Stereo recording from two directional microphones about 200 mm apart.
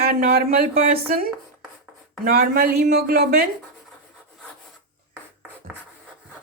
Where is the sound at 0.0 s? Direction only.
50° right (ahead or behind).